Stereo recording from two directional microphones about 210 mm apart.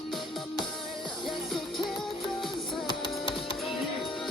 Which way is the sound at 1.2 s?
Centre (ahead or behind).